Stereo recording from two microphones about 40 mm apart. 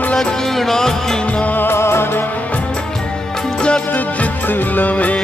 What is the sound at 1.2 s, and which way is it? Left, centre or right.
Music, left.